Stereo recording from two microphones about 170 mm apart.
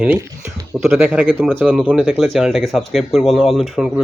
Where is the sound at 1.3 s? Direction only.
5° left (ahead or behind).